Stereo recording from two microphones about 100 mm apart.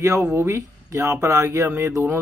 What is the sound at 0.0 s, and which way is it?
Speech, 35° right (ahead or behind).